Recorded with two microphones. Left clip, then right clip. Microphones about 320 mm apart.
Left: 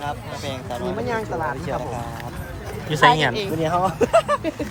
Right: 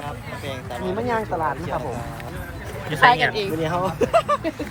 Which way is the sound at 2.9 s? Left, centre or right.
Centre.